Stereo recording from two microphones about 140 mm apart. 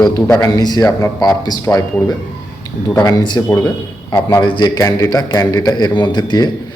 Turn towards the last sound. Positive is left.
turn(degrees=30)  # may be behind; listen again after turning